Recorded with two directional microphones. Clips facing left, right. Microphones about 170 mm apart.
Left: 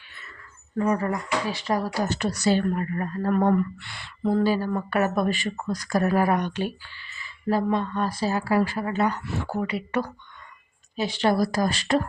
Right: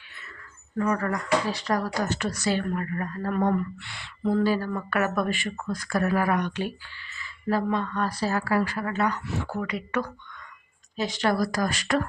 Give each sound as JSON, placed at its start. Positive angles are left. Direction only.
{"t": 0.8, "sound": "a woman's voice", "side_deg": 25}
{"t": 3.8, "sound": "a sound", "side_deg": 45}
{"t": 4.3, "sound": "a woman's voice", "side_deg": 25}
{"t": 7.5, "sound": "a woman's voice", "side_deg": 20}